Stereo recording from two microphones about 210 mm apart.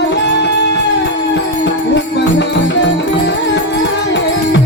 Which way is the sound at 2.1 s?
55° left (ahead or behind).